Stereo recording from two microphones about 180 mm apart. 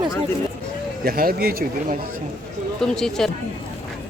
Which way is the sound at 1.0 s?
55° right (ahead or behind).